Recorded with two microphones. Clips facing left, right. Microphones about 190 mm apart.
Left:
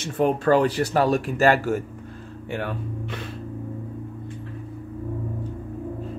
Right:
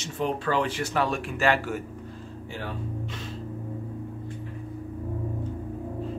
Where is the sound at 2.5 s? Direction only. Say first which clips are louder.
Left 6 dB; 60° left (ahead or behind).